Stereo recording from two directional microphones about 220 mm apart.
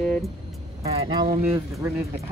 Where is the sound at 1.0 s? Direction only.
20° right (ahead or behind).